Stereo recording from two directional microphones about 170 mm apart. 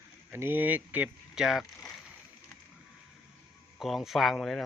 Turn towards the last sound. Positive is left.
turn(degrees=0)  # may be behind; listen again after turning